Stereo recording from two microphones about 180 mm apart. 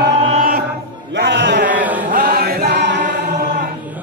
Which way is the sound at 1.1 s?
75° right (ahead or behind).